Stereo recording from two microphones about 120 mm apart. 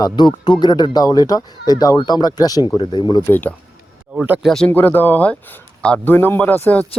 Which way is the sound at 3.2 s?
15° left (ahead or behind).